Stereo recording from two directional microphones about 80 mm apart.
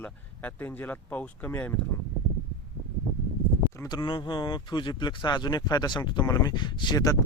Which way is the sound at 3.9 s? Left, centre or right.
Left.